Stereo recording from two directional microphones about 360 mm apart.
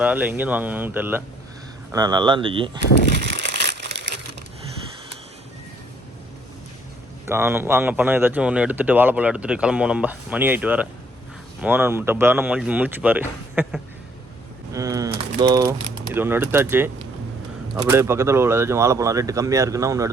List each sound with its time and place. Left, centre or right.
0.0 s speech: centre
3.2 s crumpling: right
7.3 s speech: centre
14.7 s a sound: centre
15.4 s speech: centre